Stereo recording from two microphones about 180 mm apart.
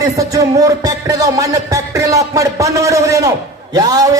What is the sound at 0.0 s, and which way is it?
A man's voice, 20° right (ahead or behind).